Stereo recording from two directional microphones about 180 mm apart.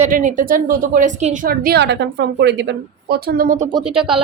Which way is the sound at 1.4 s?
55° right (ahead or behind).